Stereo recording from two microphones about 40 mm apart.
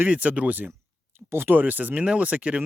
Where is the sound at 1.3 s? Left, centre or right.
Right.